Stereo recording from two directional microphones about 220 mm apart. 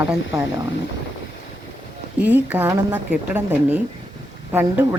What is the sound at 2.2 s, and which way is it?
A woman's voice, 5° right (ahead or behind).